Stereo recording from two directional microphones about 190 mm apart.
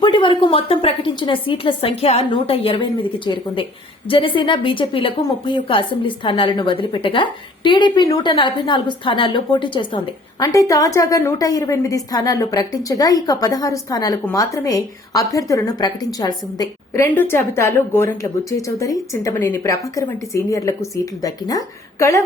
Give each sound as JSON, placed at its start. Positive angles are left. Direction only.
{"t": 0.0, "sound": "a woman's voice", "side_deg": 25}